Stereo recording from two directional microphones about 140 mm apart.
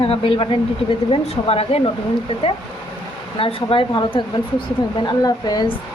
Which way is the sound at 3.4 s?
40° left (ahead or behind).